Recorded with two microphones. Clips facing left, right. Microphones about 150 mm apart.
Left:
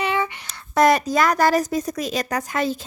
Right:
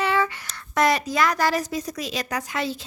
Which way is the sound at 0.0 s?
20° left (ahead or behind).